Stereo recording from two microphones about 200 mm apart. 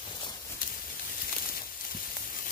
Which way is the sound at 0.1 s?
20° left (ahead or behind).